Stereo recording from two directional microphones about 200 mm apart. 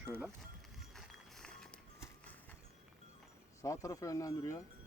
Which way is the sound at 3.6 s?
15° left (ahead or behind).